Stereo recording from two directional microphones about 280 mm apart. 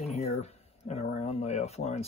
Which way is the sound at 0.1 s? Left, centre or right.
Left.